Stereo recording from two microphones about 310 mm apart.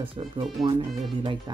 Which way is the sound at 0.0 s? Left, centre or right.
Centre.